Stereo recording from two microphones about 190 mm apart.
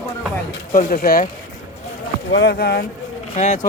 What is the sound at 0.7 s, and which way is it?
Speech, 45° left (ahead or behind).